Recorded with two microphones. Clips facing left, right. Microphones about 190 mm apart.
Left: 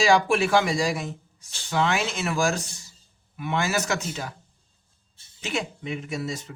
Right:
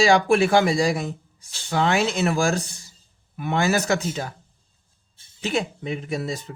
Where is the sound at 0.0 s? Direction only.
35° right (ahead or behind).